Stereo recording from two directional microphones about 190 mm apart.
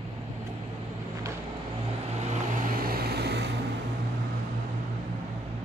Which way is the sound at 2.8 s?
55° right (ahead or behind).